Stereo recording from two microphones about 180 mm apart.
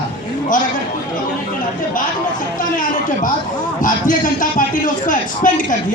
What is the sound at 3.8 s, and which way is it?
A man's voice, 50° left (ahead or behind).